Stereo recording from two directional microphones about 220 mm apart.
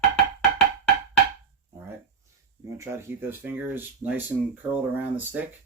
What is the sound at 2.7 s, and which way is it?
Speech, 10° right (ahead or behind).